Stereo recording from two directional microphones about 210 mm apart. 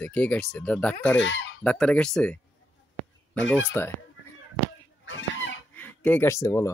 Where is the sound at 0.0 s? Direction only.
5° left (ahead or behind).